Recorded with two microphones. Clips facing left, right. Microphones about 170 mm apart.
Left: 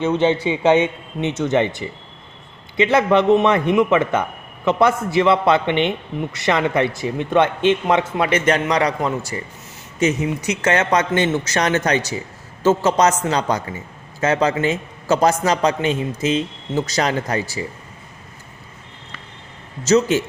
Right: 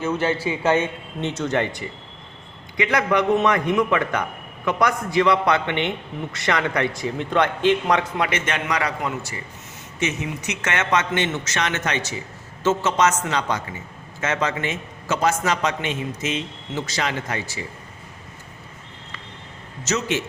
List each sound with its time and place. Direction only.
0.0 s a man's voice: 20° left (ahead or behind)
2.7 s a man's voice: 25° left (ahead or behind)
8.3 s a man's voice: 35° left (ahead or behind)
19.8 s a man's voice: 35° left (ahead or behind)